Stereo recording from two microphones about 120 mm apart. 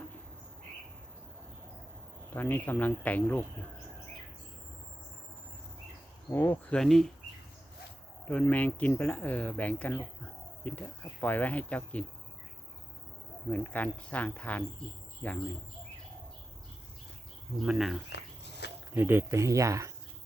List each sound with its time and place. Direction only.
2.3 s speech: 15° left (ahead or behind)
6.3 s speech: 15° left (ahead or behind)
6.7 s speech: centre (ahead or behind)
8.2 s speech: 10° left (ahead or behind)
13.5 s speech: 10° left (ahead or behind)
17.7 s speech: centre (ahead or behind)
18.9 s speech: 20° right (ahead or behind)